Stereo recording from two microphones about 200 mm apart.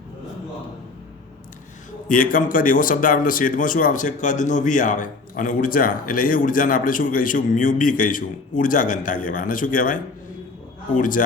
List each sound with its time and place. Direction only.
2.0 s speech: 45° left (ahead or behind)